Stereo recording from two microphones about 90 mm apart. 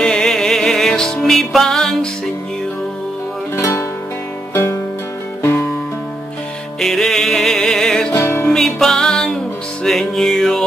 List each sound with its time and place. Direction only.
0.0 s music: 10° left (ahead or behind)
3.5 s music: 30° left (ahead or behind)
5.4 s music: 25° left (ahead or behind)
6.8 s music: 5° left (ahead or behind)
8.1 s music: 25° left (ahead or behind)
8.5 s music: 5° left (ahead or behind)